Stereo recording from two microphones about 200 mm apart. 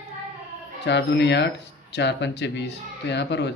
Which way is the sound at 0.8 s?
60° left (ahead or behind).